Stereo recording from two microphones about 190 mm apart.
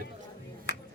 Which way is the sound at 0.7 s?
65° left (ahead or behind).